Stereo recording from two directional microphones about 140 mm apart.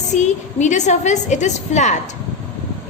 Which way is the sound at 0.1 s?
55° left (ahead or behind).